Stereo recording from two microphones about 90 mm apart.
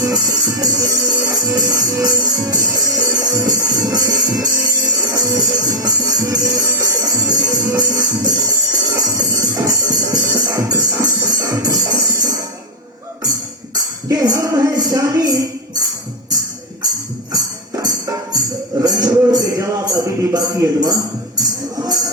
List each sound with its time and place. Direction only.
0.0 s music: 45° right (ahead or behind)
14.1 s music: 45° right (ahead or behind)
17.8 s music: 45° right (ahead or behind)